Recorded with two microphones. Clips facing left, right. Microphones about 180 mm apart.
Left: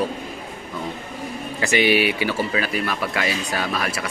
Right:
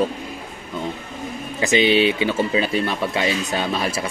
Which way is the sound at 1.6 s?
20° right (ahead or behind).